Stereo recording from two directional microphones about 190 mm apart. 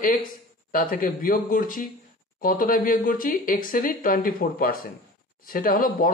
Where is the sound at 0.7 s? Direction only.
45° left (ahead or behind).